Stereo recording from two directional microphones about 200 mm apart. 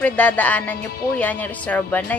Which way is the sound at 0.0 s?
5° left (ahead or behind).